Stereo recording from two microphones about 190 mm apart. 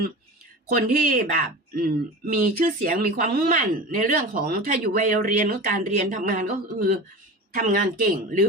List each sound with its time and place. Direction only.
0.7 s speech: 45° right (ahead or behind)